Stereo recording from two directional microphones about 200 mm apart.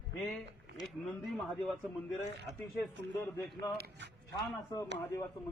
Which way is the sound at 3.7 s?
50° right (ahead or behind).